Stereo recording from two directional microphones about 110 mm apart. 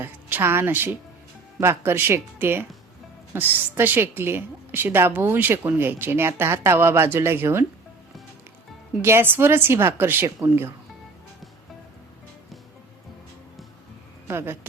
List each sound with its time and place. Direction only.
0.0 s a woman's voice: 20° right (ahead or behind)
9.0 s a woman's voice: 20° right (ahead or behind)
14.3 s speech: 20° right (ahead or behind)